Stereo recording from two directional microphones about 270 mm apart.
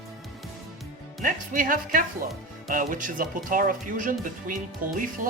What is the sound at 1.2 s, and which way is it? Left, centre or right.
Speech, right.